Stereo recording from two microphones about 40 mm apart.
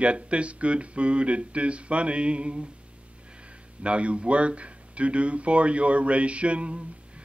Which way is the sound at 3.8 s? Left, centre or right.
Right.